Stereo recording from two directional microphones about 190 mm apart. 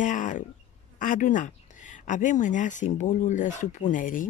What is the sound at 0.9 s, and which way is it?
Speech, 45° left (ahead or behind).